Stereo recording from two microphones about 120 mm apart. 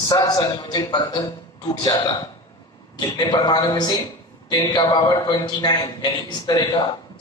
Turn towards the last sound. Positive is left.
turn(degrees=35)  # may be behind; listen again after turning